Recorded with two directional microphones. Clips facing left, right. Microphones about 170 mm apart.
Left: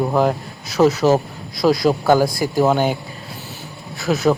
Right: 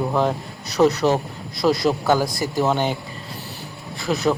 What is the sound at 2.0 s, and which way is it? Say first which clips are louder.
Speech: left 5 dB; 10° left (ahead or behind).